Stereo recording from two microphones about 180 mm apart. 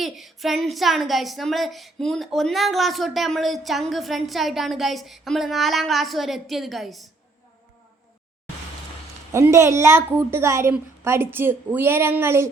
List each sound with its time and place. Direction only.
0.0 s a woman's voice: centre (ahead or behind)
9.3 s a woman's voice: 15° right (ahead or behind)